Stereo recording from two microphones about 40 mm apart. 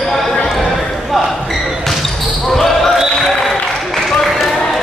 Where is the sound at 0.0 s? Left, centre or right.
Centre.